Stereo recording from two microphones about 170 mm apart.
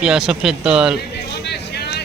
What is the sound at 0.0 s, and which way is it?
Speech, 5° right (ahead or behind).